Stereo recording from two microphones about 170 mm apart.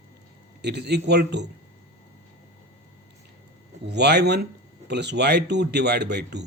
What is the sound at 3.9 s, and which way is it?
Speech, 80° right.